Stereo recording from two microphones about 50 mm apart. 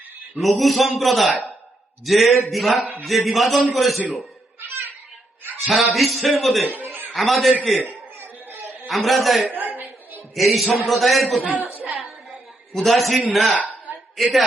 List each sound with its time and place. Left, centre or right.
0.3 s a man's voice: centre
5.5 s a man's voice: centre
6.8 s chuckle: right
7.1 s a man's voice: centre
8.9 s a man's voice: centre
9.6 s a sound: right
10.3 s a man's voice: centre
11.6 s a sound: right
12.7 s a man's voice: centre